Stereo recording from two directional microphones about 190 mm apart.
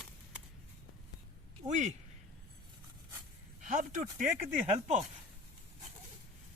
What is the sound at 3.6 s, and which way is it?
Speech, 40° right (ahead or behind).